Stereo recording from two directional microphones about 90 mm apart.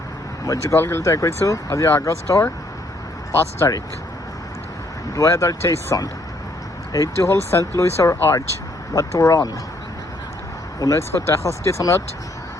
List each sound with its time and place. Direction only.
0.4 s speech: 40° left (ahead or behind)
0.8 s speech: 25° left (ahead or behind)
3.6 s speech: 35° left (ahead or behind)
5.1 s speech: 35° left (ahead or behind)
10.8 s speech: 35° left (ahead or behind)